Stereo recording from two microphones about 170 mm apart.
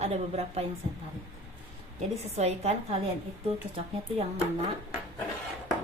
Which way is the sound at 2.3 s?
40° right (ahead or behind).